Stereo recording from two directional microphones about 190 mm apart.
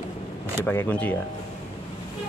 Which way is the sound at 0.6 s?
10° left (ahead or behind).